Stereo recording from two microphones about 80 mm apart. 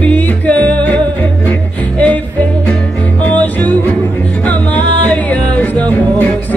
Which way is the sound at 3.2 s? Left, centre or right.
Centre.